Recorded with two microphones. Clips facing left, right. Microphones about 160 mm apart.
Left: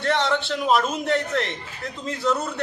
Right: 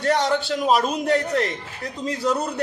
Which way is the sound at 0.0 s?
40° right (ahead or behind).